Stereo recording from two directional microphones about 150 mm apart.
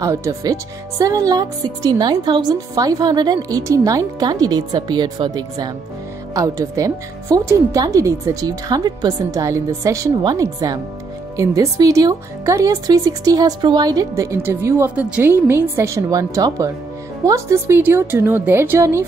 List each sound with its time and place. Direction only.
0.0 s a woman's voice: 20° right (ahead or behind)